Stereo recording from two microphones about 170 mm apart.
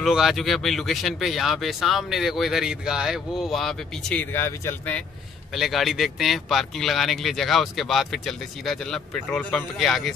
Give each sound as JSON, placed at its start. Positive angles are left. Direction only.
{"t": 0.0, "sound": "speech", "side_deg": 0}
{"t": 5.5, "sound": "speech", "side_deg": 0}